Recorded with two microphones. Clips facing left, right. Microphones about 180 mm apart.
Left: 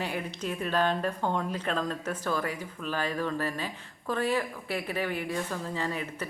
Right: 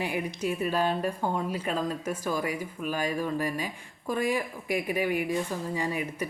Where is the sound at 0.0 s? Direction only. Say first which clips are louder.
Right 3 dB; 10° right (ahead or behind).